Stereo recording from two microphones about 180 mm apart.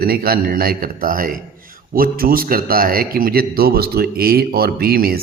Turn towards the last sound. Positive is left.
turn(degrees=-55)  # may be behind; listen again after turning